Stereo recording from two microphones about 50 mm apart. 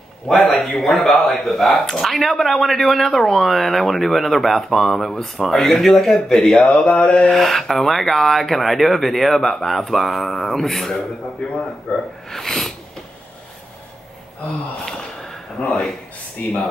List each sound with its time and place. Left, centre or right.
0.5 s speech: centre
6.8 s mantra: left
7.2 s speech: centre
11.9 s mantra: left
12.3 s speech: centre
15.6 s speech: centre
16.4 s speech: left